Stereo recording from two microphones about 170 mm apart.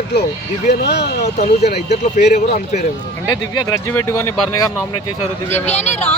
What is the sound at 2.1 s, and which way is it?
Speech, 40° left (ahead or behind).